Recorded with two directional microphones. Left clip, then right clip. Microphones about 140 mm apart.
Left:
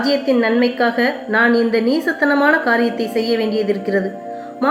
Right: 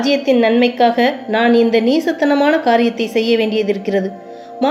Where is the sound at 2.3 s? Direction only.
20° right (ahead or behind).